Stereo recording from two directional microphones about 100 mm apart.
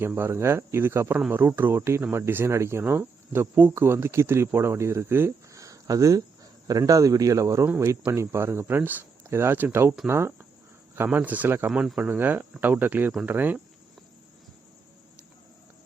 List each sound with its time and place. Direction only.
0.0 s speech: 25° right (ahead or behind)
5.6 s a sound: 35° right (ahead or behind)
6.7 s a man's voice: 35° right (ahead or behind); by 11.7 s 20° right (ahead or behind)
11.7 s speech: 10° right (ahead or behind)